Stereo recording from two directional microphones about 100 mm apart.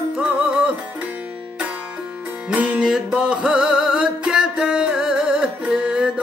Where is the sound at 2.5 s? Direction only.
10° right (ahead or behind).